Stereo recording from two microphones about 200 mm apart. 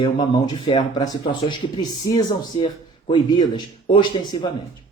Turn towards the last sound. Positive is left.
turn(degrees=25)  # may be behind; listen again after turning